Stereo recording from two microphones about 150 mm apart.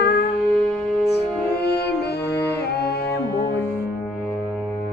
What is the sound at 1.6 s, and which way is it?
Music, 90° left.